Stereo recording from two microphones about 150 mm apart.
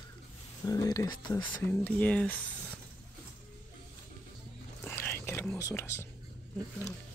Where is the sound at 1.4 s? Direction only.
10° left (ahead or behind).